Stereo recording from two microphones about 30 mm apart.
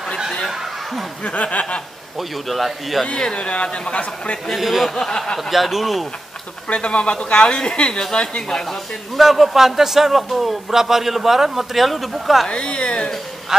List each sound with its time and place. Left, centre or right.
1.2 s a sound: left
2.1 s a man's voice: centre
3.3 s speech: left
4.6 s a man's voice: centre
4.9 s speech: centre
5.4 s a man's voice: centre
6.7 s speech: left
8.5 s speech: centre
9.1 s a man's voice: centre
12.4 s speech: left
13.5 s speech: centre